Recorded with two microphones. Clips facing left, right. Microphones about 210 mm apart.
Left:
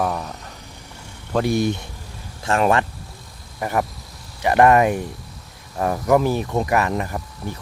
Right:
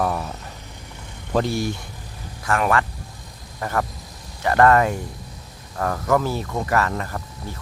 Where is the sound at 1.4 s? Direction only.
15° left (ahead or behind).